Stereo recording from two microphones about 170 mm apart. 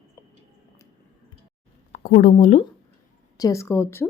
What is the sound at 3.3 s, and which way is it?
Speech, 20° left (ahead or behind).